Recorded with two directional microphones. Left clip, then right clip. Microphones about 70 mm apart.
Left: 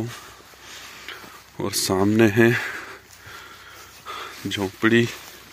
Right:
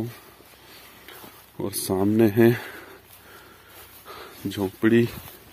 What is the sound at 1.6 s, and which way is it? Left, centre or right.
Speech, centre.